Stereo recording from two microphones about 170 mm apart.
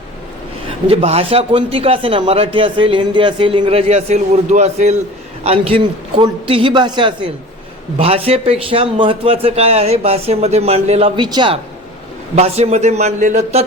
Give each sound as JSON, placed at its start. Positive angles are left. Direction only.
{"t": 0.9, "sound": "a man's voice", "side_deg": -35}